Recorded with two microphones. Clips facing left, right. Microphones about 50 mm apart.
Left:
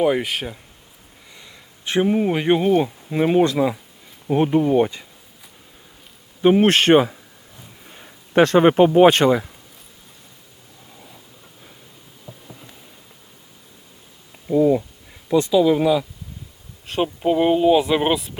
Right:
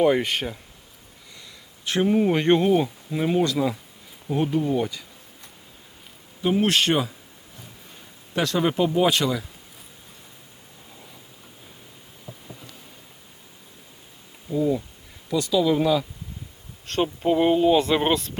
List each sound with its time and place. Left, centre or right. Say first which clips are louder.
0.0 s speech: left 1 dB; centre
1.4 s a sound: left 2 dB; left
2.0 s speech: right 1 dB; centre
2.8 s speech: left 5 dB; left
6.4 s speech: left 6 dB; left
12.2 s a sound: left 1 dB; centre
14.4 s speech: left 7 dB; left
15.6 s speech: left 4 dB; centre